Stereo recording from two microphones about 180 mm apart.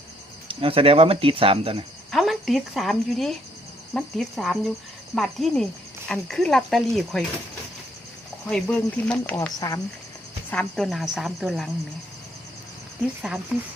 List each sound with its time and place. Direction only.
0.4 s speech: 30° right (ahead or behind)
2.0 s speech: centre (ahead or behind)
8.4 s speech: 5° left (ahead or behind)
9.6 s speech: 20° left (ahead or behind)
10.5 s speech: 5° left (ahead or behind)